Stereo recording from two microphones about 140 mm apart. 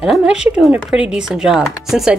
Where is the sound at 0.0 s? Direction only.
5° right (ahead or behind).